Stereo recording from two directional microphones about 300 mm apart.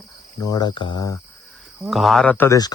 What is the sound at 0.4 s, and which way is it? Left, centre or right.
Speech, centre.